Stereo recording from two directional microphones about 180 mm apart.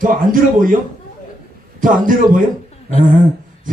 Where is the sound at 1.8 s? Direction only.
50° right (ahead or behind).